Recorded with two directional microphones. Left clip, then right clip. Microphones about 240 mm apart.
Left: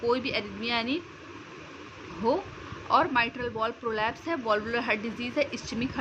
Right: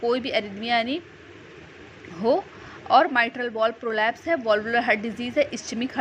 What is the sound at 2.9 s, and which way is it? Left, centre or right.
A woman's voice, centre.